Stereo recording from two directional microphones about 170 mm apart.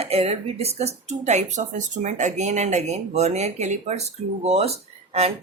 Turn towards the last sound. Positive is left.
turn(degrees=-35)  # may be behind; listen again after turning